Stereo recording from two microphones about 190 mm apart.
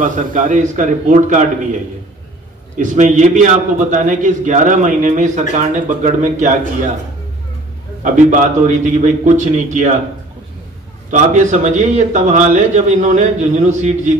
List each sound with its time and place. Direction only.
0.0 s a man's voice: 45° right (ahead or behind)
2.8 s a man's voice: 40° right (ahead or behind)
8.0 s a man's voice: 40° right (ahead or behind)
11.1 s a man's voice: 40° right (ahead or behind)